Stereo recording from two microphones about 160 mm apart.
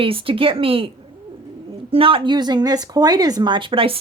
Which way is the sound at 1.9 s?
35° right (ahead or behind).